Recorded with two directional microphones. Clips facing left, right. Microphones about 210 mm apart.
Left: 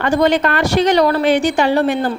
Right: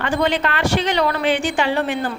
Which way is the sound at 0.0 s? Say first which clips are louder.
Left 5 dB; 45° left (ahead or behind).